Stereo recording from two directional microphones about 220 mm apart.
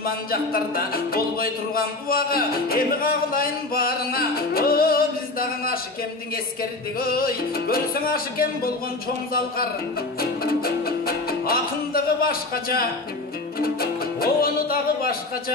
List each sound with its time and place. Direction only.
0.0 s music: 45° left (ahead or behind)
7.0 s music: 40° left (ahead or behind)
10.4 s music: 45° left (ahead or behind)